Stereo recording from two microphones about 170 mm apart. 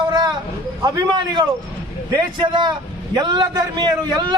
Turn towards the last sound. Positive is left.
turn(degrees=-25)  # may be behind; listen again after turning